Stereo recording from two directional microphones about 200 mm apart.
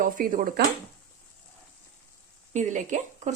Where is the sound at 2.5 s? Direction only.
35° right (ahead or behind).